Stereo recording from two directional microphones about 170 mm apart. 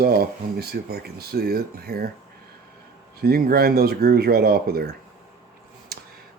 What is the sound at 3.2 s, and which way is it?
Speech, 60° right (ahead or behind).